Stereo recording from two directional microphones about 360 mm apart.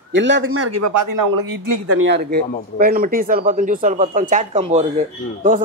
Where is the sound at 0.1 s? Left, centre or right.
Right.